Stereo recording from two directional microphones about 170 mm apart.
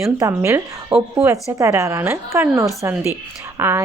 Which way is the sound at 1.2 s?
15° right (ahead or behind).